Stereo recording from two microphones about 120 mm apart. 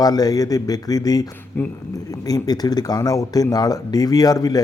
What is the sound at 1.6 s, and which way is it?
Speech, 20° left (ahead or behind).